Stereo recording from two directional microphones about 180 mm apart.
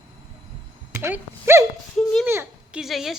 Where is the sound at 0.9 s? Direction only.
10° right (ahead or behind).